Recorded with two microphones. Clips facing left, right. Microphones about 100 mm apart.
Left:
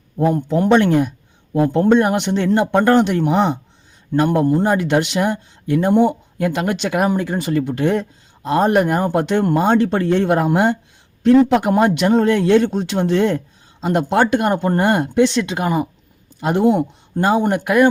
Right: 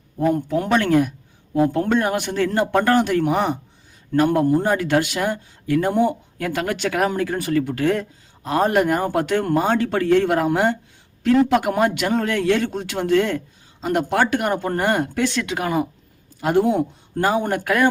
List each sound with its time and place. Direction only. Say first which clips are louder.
0.2 s speech: left 3 dB; 25° left (ahead or behind)